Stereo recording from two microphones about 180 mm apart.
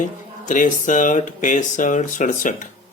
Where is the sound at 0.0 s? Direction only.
45° left (ahead or behind).